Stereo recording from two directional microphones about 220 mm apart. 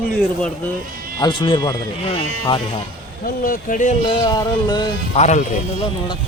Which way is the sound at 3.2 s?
40° left (ahead or behind).